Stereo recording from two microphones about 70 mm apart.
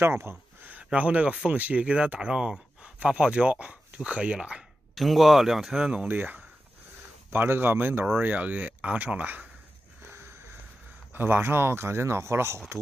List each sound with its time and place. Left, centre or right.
0.0 s a sound: right
0.7 s speech: centre
4.9 s speech: centre
6.0 s speech: right
10.0 s sniff: right
11.1 s speech: right